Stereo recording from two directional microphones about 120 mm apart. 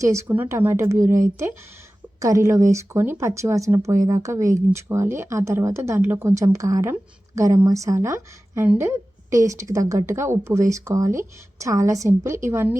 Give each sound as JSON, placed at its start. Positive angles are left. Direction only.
{"t": 0.0, "sound": "speech", "side_deg": -25}